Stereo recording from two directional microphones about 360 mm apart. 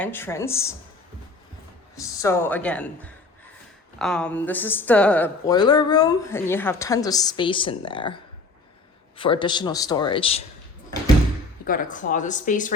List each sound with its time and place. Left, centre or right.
0.0 s speech: centre
2.0 s speech: centre
11.6 s speech: left